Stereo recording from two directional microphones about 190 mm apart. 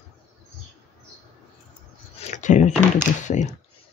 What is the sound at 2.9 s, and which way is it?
Speech, 40° left (ahead or behind).